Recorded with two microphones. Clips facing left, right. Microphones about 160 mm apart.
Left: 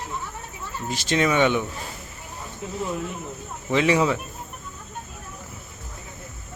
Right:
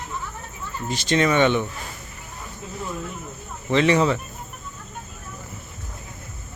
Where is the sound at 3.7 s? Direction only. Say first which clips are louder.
Right 2 dB; 5° left (ahead or behind).